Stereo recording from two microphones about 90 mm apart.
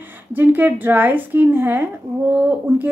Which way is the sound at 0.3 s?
20° right (ahead or behind).